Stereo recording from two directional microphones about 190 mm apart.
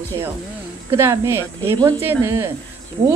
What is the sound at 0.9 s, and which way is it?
Speech, 15° right (ahead or behind).